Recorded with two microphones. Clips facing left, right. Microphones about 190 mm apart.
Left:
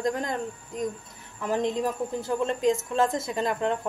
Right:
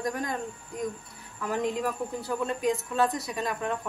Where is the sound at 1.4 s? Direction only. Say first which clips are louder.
Left 3 dB; 20° left (ahead or behind).